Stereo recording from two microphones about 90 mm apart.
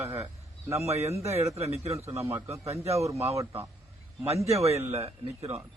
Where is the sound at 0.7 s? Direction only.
35° right (ahead or behind).